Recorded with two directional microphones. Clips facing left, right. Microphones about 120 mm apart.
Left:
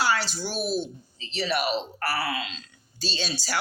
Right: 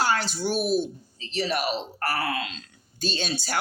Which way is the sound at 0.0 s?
45° right (ahead or behind).